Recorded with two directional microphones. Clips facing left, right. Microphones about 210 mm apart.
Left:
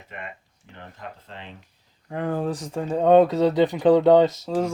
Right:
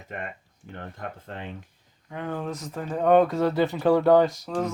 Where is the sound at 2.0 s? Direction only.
35° left (ahead or behind).